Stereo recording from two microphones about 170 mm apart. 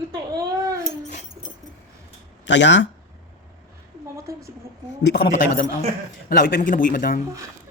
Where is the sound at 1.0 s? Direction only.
45° left (ahead or behind).